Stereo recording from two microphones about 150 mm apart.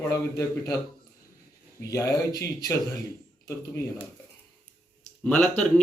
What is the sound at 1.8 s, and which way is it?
Speech, 20° left (ahead or behind).